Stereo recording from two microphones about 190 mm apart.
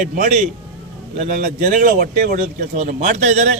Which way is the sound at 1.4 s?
45° right (ahead or behind).